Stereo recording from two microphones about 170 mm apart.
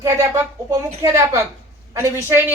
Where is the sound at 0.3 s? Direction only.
20° right (ahead or behind).